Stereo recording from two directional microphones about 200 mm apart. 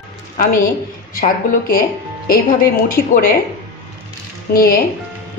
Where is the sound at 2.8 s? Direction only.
45° left (ahead or behind).